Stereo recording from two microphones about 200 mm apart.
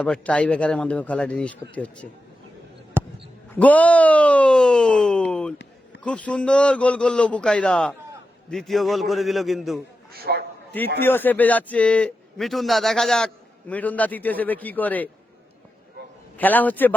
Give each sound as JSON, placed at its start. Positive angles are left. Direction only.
{"t": 0.0, "sound": "a man's voice", "side_deg": 5}
{"t": 3.0, "sound": "basketball bounce", "side_deg": -10}
{"t": 3.5, "sound": "speech", "side_deg": 5}
{"t": 10.1, "sound": "a man's voice", "side_deg": -50}
{"t": 11.0, "sound": "a man's voice", "side_deg": 10}
{"t": 16.4, "sound": "a man's voice", "side_deg": 10}